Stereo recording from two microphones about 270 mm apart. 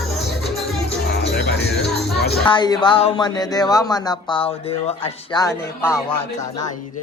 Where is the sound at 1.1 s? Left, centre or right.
Left.